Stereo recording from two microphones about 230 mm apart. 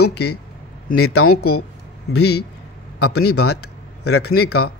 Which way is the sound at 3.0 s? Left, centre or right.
Left.